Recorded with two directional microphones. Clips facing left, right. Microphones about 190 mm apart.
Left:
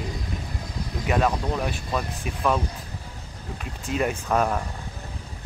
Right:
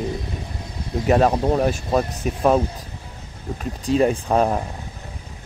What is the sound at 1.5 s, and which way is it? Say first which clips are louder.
Speech: right 8 dB; 45° right (ahead or behind).